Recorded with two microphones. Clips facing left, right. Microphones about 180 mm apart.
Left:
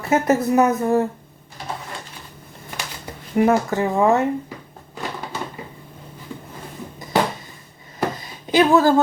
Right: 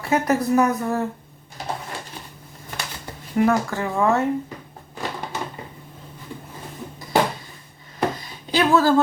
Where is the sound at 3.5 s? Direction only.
20° left (ahead or behind).